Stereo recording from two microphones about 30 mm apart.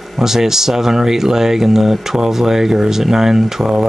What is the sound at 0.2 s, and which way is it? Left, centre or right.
Speech, centre.